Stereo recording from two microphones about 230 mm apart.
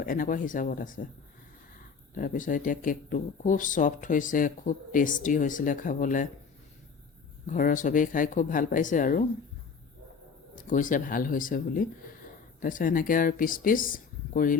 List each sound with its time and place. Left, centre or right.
0.0 s speech: left
2.1 s speech: left
7.4 s speech: left
10.5 s speech: left